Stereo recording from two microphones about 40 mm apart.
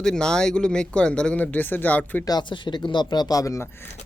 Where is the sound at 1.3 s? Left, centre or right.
Left.